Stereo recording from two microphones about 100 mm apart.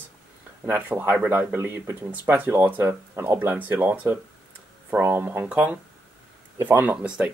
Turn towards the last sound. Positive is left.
turn(degrees=-10)  # may be behind; listen again after turning